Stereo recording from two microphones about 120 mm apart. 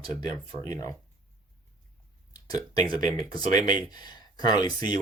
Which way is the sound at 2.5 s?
35° left (ahead or behind).